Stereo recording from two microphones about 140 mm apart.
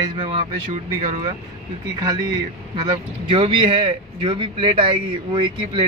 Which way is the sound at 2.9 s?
40° right (ahead or behind).